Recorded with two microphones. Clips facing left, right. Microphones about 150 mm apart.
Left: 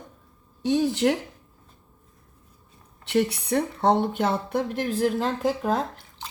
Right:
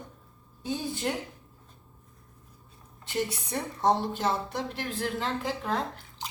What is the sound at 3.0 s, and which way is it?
Speech, 70° left (ahead or behind).